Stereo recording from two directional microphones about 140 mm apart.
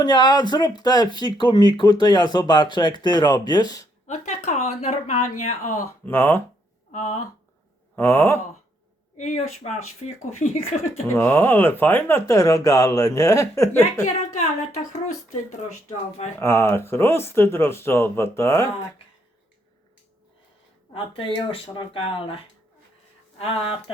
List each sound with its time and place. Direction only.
0.0 s speech: 30° left (ahead or behind)
4.0 s speech: 60° left (ahead or behind)
6.1 s speech: 15° left (ahead or behind)
6.9 s a woman's voice: 60° left (ahead or behind)
7.9 s speech: 15° left (ahead or behind)
9.1 s speech: 55° left (ahead or behind)
11.1 s speech: 15° left (ahead or behind)
14.3 s a woman's voice: 60° left (ahead or behind)
16.4 s speech: 15° left (ahead or behind)
20.9 s speech: 40° left (ahead or behind)